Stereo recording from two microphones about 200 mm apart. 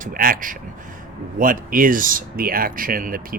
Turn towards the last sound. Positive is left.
turn(degrees=-45)  # may be behind; listen again after turning